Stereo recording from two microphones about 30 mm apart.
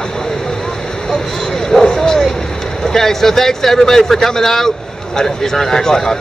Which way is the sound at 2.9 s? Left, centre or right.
Centre.